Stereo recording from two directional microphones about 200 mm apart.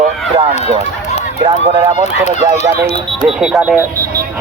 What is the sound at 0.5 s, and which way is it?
Run, 30° left (ahead or behind).